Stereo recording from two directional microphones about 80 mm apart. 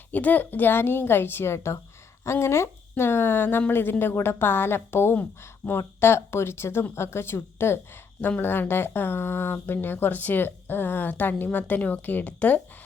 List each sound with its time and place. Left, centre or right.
0.1 s speech: left